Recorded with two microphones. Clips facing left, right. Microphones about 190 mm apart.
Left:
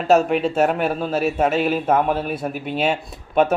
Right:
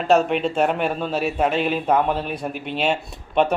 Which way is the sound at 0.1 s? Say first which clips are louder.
Left 2 dB; 5° left (ahead or behind).